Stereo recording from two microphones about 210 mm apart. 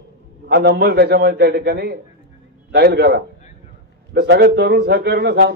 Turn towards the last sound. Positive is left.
turn(degrees=-50)  # may be behind; listen again after turning